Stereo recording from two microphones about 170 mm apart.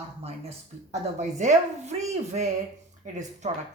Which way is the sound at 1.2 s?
45° right (ahead or behind).